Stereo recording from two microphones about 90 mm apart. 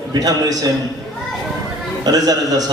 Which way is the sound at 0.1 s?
45° right (ahead or behind).